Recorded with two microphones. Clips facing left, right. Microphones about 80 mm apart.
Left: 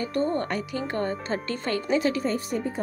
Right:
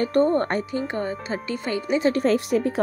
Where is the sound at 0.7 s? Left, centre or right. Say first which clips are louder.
Right 2 dB; centre.